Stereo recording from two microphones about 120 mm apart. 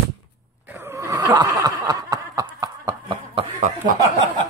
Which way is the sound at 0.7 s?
20° right (ahead or behind).